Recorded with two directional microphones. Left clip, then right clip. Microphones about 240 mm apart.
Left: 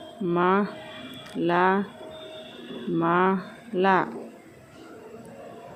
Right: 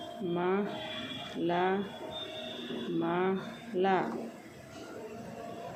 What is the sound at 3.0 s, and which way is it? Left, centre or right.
Speech, left.